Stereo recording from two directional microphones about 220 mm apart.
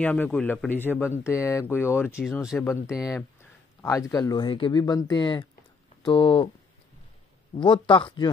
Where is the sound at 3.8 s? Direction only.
15° left (ahead or behind).